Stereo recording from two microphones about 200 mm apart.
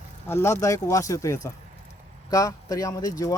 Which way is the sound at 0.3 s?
10° left (ahead or behind).